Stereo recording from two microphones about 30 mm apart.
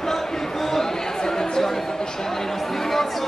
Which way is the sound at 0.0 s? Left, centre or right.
Centre.